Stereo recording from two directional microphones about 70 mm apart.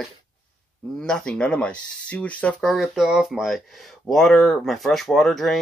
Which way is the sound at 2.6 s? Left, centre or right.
Centre.